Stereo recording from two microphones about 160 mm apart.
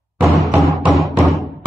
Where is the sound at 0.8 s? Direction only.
Centre (ahead or behind).